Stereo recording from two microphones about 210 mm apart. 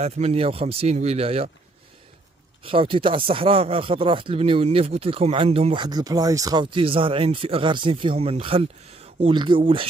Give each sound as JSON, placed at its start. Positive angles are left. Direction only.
{"t": 0.0, "sound": "speech", "side_deg": -30}
{"t": 2.6, "sound": "speech", "side_deg": -25}